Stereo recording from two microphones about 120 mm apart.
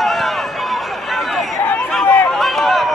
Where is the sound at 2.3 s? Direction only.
Centre (ahead or behind).